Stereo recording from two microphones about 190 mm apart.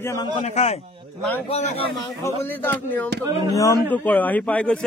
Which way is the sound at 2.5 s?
10° left (ahead or behind).